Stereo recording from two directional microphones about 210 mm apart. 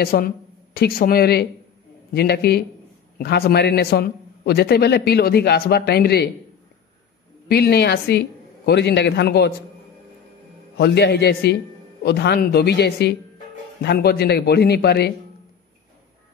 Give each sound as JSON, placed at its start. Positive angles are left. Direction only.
{"t": 0.0, "sound": "a man's voice", "side_deg": 45}
{"t": 7.4, "sound": "a man's voice", "side_deg": 50}
{"t": 10.8, "sound": "a man's voice", "side_deg": 50}